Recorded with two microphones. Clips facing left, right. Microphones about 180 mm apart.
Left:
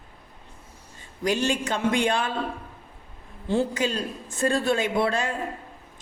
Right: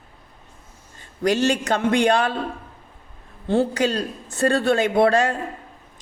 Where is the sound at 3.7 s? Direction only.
70° right (ahead or behind).